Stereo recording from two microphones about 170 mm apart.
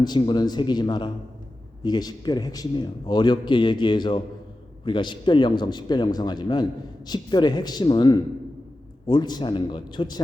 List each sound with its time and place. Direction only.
0.0 s a man's voice: 25° left (ahead or behind)